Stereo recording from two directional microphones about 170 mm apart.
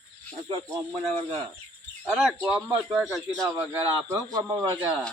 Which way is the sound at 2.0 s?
5° right (ahead or behind).